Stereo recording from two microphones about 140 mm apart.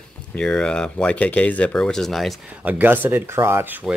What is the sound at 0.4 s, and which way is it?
Speech, 5° left (ahead or behind).